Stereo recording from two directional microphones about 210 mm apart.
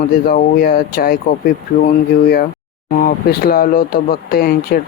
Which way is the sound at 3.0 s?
45° left (ahead or behind).